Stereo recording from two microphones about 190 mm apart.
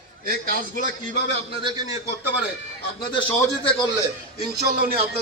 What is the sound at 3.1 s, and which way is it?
Speech, 25° left (ahead or behind).